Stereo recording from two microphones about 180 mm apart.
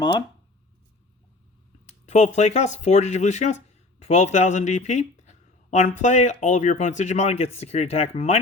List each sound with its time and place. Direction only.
0.0 s speech: 20° left (ahead or behind)
2.0 s speech: 40° left (ahead or behind)